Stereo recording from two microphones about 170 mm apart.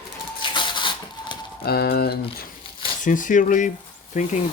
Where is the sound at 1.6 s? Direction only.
65° left (ahead or behind).